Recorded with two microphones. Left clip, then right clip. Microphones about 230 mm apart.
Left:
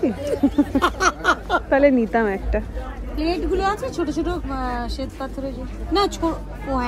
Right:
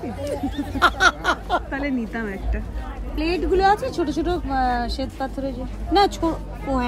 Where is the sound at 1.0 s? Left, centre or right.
Right.